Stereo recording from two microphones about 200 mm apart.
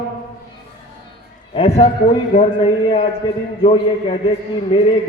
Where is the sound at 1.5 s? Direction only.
30° left (ahead or behind).